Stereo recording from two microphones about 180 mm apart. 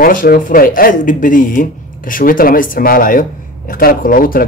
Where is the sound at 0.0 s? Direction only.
50° left (ahead or behind).